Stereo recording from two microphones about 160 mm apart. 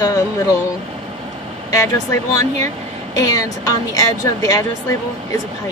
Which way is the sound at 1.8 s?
20° left (ahead or behind).